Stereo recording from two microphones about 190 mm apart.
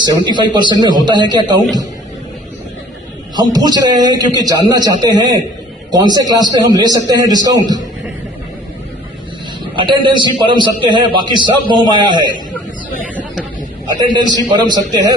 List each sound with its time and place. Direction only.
0.0 s a man's voice: 25° right (ahead or behind)
3.3 s a man's voice: 20° right (ahead or behind)
9.7 s a man's voice: 25° right (ahead or behind)
13.9 s a man's voice: 20° right (ahead or behind)